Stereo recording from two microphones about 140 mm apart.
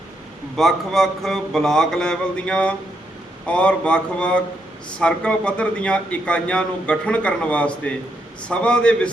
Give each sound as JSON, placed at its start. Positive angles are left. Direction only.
{"t": 0.5, "sound": "a man's voice", "side_deg": 5}